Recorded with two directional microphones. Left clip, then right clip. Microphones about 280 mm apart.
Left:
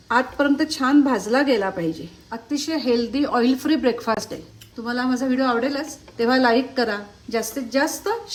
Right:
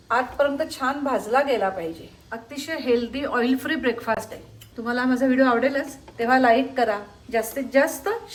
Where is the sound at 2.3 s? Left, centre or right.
Centre.